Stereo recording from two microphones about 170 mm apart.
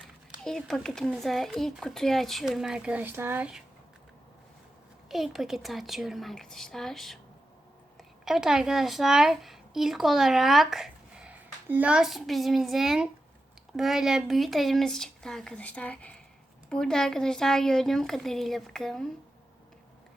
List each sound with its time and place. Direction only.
0.4 s speech: 5° left (ahead or behind)
5.0 s a woman's voice: centre (ahead or behind)